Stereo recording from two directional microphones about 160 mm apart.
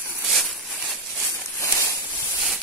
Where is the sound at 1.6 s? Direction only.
15° left (ahead or behind).